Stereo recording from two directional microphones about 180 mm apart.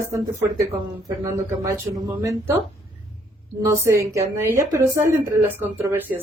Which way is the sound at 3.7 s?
15° right (ahead or behind).